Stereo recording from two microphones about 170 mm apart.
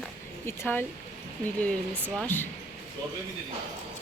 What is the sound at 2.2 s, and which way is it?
Speech, 10° left (ahead or behind).